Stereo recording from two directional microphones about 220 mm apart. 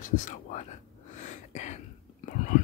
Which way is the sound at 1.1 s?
35° left (ahead or behind).